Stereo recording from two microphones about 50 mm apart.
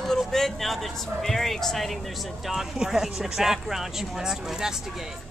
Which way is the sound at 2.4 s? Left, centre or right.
Centre.